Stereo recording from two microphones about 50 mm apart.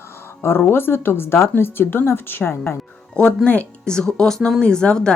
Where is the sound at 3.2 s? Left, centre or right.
Left.